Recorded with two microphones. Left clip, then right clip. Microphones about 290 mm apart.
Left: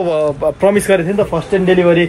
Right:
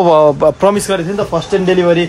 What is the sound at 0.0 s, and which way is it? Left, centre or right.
Speech, centre.